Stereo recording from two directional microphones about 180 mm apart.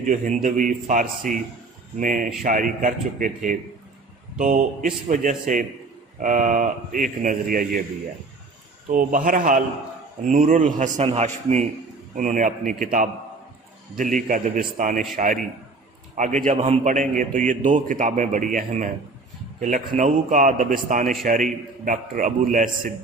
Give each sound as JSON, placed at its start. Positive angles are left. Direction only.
{"t": 0.0, "sound": "a man's voice", "side_deg": -45}
{"t": 8.9, "sound": "a man's voice", "side_deg": -50}